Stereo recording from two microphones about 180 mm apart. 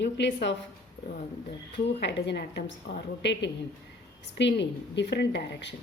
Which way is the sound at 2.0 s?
75° left (ahead or behind).